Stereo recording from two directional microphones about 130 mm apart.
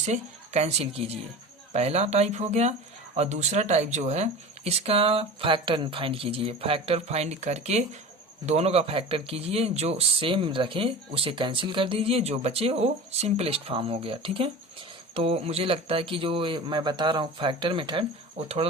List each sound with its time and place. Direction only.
0.0 s speech: 60° right (ahead or behind); by 18.0 s 40° right (ahead or behind)
18.3 s speech: 55° right (ahead or behind)